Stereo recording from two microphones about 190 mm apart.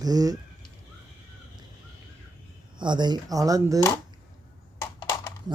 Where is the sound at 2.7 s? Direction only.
25° right (ahead or behind).